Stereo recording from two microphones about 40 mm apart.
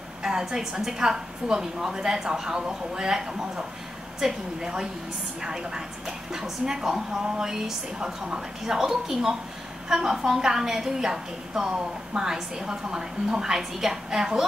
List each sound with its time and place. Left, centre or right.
0.2 s a woman's voice: centre